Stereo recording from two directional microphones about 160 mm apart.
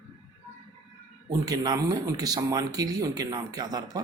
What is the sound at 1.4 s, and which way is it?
Speech, 25° right (ahead or behind).